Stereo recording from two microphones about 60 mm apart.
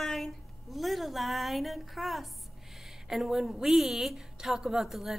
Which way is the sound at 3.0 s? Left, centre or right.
Centre.